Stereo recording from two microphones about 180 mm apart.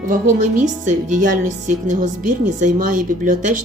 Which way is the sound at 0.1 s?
45° right (ahead or behind).